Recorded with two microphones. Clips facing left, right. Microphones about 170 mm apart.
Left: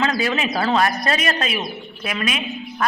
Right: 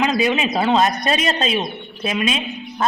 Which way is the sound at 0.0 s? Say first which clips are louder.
Right 3 dB; 20° right (ahead or behind).